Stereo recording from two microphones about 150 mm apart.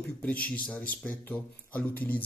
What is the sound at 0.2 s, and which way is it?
Speech, 10° left (ahead or behind).